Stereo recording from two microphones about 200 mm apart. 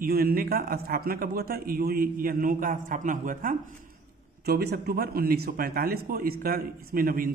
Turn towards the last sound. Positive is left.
turn(degrees=-45)  # may be behind; listen again after turning